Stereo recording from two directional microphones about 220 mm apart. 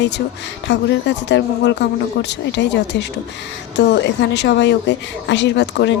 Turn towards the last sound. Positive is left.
turn(degrees=50)  # may be behind; listen again after turning